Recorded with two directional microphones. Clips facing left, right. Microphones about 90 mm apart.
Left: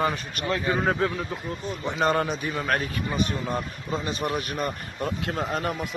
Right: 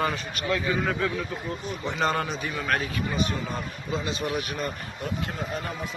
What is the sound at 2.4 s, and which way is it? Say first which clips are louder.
Speech: left 2 dB; 25° left (ahead or behind).